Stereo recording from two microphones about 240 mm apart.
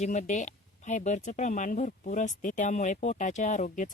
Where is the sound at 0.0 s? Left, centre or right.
Left.